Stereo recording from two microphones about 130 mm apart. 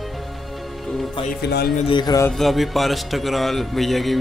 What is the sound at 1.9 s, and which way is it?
Speech, 35° left (ahead or behind).